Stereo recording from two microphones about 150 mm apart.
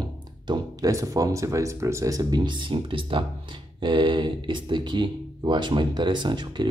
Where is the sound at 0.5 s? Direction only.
25° right (ahead or behind).